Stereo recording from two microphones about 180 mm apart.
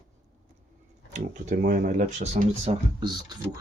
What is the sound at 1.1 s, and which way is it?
Speech, 45° right (ahead or behind).